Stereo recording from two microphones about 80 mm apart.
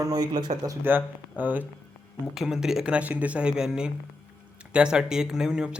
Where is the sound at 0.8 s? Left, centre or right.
Right.